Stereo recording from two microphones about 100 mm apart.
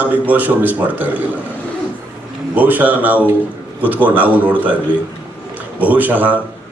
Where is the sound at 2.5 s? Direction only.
15° right (ahead or behind).